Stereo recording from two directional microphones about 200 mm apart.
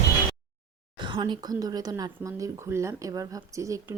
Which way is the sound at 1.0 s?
25° right (ahead or behind).